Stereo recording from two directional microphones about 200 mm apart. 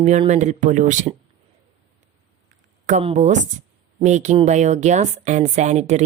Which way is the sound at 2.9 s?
35° right (ahead or behind).